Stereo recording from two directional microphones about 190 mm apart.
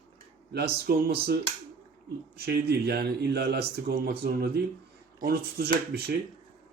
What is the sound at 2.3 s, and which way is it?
A man's voice, 55° right (ahead or behind).